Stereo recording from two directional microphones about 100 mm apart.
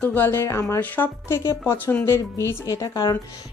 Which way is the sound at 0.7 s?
20° left (ahead or behind).